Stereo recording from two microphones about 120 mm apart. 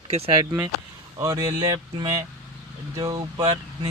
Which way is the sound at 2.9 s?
30° right (ahead or behind).